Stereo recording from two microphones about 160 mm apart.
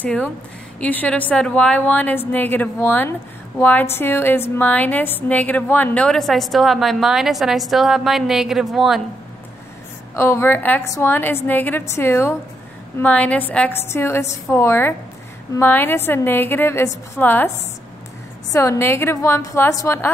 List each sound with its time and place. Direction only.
0.0 s a woman's voice: 10° left (ahead or behind)
10.1 s a woman's voice: 15° left (ahead or behind)